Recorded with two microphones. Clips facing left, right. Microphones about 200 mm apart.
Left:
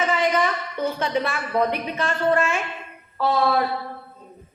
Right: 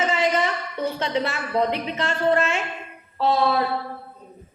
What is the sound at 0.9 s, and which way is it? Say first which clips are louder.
A woman's voice: left 1 dB; 25° right (ahead or behind).